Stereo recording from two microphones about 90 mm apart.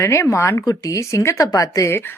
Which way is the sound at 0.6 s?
45° left (ahead or behind).